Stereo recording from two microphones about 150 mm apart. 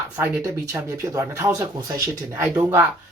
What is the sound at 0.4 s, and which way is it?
Speech, 20° right (ahead or behind).